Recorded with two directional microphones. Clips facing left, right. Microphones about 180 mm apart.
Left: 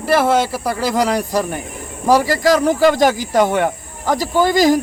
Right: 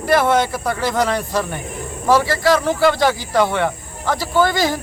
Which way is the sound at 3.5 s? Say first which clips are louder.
Left 2 dB; 15° left (ahead or behind).